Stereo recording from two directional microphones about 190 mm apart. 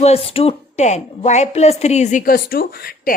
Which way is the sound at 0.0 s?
30° left (ahead or behind).